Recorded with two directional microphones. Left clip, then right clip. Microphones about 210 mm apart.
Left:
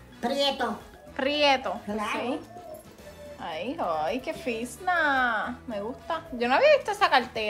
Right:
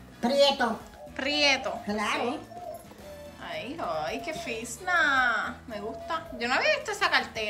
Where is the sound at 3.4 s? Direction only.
10° left (ahead or behind).